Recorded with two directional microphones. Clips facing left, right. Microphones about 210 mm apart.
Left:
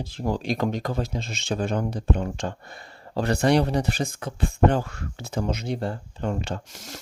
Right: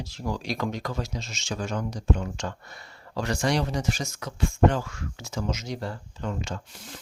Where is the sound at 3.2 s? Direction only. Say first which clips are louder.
Left 6 dB; 60° left (ahead or behind).